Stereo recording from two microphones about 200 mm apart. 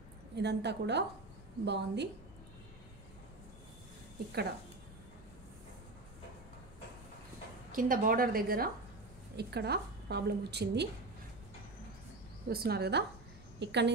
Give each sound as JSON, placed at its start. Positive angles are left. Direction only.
{"t": 0.4, "sound": "a woman's voice", "side_deg": -60}
{"t": 7.7, "sound": "a woman's voice", "side_deg": -45}
{"t": 12.4, "sound": "a woman's voice", "side_deg": -50}